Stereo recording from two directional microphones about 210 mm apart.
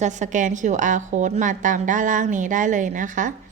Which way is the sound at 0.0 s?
35° right (ahead or behind).